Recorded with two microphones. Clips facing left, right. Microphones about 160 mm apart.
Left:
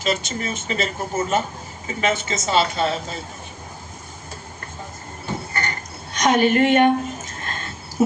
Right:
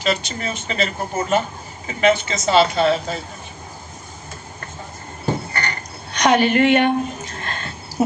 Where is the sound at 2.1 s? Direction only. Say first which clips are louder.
Right 3 dB; 50° left (ahead or behind).